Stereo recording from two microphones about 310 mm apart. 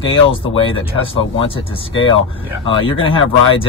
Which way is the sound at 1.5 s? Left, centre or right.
Centre.